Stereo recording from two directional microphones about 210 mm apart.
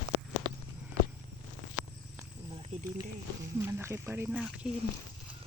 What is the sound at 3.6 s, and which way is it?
Speech, 10° right (ahead or behind).